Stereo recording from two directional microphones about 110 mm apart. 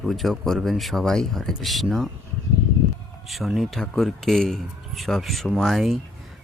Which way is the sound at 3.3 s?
Centre (ahead or behind).